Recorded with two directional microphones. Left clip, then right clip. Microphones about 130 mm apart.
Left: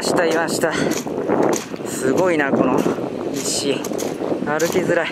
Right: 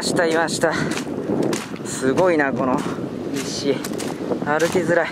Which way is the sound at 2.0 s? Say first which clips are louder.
Even; 5° left (ahead or behind).